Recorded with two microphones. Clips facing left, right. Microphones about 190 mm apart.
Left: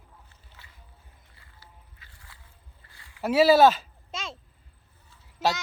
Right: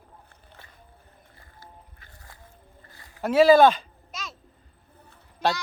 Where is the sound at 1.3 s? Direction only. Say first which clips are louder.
Right 7 dB; 50° right (ahead or behind).